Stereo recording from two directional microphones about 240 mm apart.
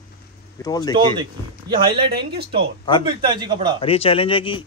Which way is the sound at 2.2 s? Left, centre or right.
Right.